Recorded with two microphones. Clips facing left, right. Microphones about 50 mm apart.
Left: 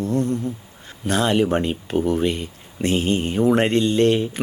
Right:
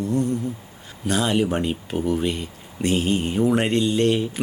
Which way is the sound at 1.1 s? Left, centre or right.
Centre.